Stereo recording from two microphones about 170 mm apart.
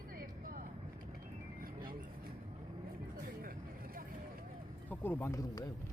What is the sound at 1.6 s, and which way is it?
Vehicle, 55° right (ahead or behind).